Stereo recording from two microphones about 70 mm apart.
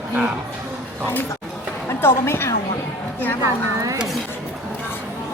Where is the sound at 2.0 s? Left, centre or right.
Left.